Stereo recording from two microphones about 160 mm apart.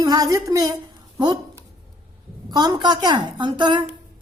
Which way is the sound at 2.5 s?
25° right (ahead or behind).